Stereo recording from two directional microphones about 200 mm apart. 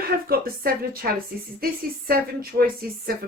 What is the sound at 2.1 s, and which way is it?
A woman's voice, 50° right (ahead or behind).